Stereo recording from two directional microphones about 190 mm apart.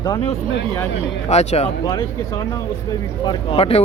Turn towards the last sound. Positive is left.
turn(degrees=30)  # may be behind; listen again after turning